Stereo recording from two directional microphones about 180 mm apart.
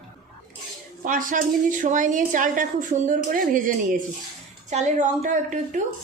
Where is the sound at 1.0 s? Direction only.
50° right (ahead or behind).